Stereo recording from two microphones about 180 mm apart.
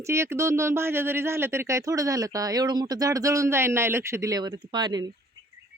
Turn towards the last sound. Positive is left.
turn(degrees=-25)  # may be behind; listen again after turning